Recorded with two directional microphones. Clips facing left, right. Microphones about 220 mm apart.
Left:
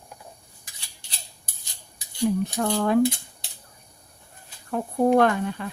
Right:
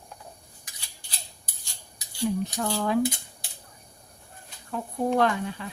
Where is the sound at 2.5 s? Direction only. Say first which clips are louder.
Left 4 dB; 55° left (ahead or behind).